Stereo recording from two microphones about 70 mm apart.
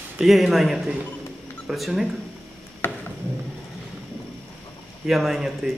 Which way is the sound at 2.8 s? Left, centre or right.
Left.